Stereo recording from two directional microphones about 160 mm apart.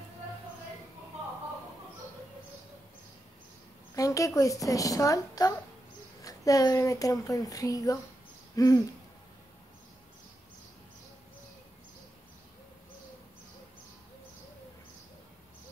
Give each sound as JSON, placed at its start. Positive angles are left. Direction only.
{"t": 3.9, "sound": "a woman's voice", "side_deg": 20}